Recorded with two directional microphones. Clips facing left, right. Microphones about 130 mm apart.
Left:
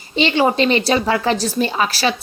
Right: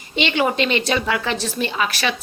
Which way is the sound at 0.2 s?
35° left (ahead or behind).